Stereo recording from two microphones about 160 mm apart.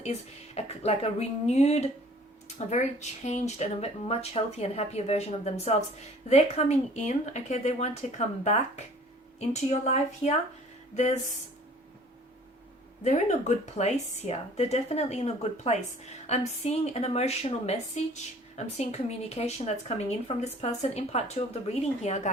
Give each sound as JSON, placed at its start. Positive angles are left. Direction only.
{"t": 0.0, "sound": "speech", "side_deg": 40}
{"t": 13.1, "sound": "speech", "side_deg": 45}